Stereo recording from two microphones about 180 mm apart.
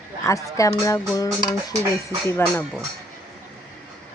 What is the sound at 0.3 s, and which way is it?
Speech, 20° left (ahead or behind).